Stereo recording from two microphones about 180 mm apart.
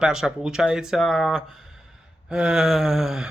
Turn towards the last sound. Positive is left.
turn(degrees=0)  # may be behind; listen again after turning